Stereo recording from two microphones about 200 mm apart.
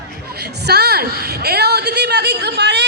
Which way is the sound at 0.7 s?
55° right (ahead or behind).